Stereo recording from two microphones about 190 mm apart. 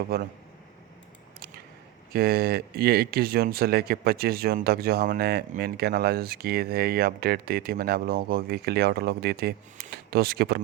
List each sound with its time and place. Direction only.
0.1 s speech: 55° right (ahead or behind)
2.1 s speech: 55° right (ahead or behind)